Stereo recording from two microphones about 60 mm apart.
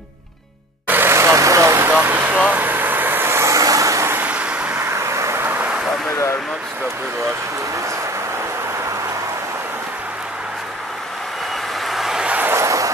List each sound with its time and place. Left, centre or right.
0.8 s vehicle: right
1.1 s vehicle: right
1.9 s vehicle: right
3.4 s vehicle: right
4.3 s vehicle: centre
4.7 s vehicle: right
5.4 s vehicle: right
11.8 s vehicle: centre
12.3 s vehicle: right
12.5 s a sound: right